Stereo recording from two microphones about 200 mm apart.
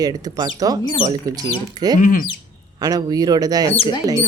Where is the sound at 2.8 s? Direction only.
20° right (ahead or behind).